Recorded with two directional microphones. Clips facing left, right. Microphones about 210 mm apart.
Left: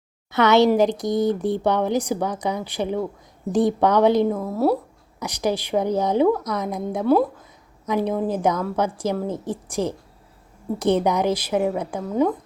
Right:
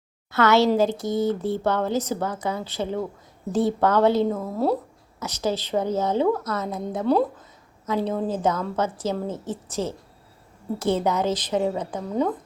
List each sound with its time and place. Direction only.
0.3 s speech: 20° left (ahead or behind)
4.4 s a woman's voice: 5° left (ahead or behind)